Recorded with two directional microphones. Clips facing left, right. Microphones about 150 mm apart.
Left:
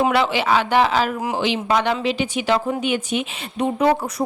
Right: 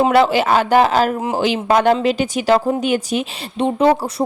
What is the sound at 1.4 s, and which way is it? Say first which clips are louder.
A woman's voice: right 5 dB; 45° right (ahead or behind).